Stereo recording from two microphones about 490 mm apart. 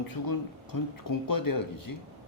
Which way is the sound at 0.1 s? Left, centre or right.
Left.